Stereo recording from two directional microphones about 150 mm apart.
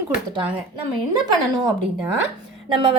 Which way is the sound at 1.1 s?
30° right (ahead or behind).